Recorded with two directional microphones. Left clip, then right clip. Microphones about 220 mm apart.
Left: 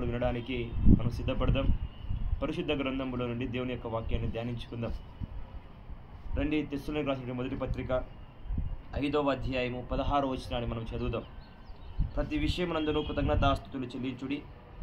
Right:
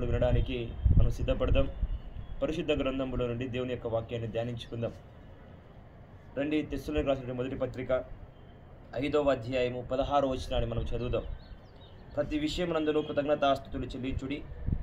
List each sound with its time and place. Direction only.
0.0 s a man's voice: 10° right (ahead or behind)
6.3 s a man's voice: 10° right (ahead or behind)